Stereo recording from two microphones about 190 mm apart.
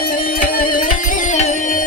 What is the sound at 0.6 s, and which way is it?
Music, 45° left (ahead or behind).